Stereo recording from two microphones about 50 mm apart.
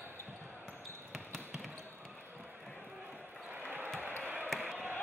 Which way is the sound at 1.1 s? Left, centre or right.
Centre.